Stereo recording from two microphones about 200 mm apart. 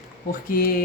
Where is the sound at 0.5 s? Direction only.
45° left (ahead or behind).